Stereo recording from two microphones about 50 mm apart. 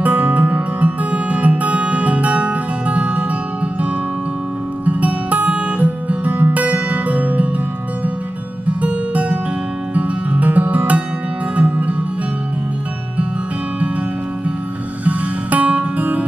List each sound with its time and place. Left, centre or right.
0.0 s music: right
4.8 s music: right
8.8 s music: right
15.0 s music: right